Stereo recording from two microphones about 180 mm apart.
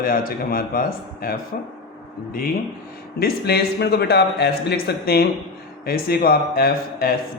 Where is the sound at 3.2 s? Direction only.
60° left (ahead or behind).